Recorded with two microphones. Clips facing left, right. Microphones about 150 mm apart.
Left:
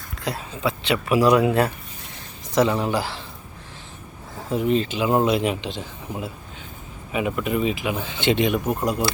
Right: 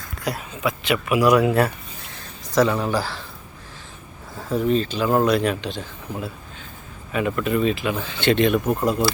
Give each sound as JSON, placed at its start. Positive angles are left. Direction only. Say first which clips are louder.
{"t": 0.2, "sound": "speech", "louder": "right 1 dB", "side_deg": 25}
{"t": 4.4, "sound": "speech", "louder": "right 1 dB", "side_deg": 15}